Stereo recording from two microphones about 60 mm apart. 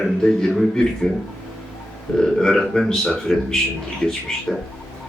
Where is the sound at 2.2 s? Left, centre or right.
Centre.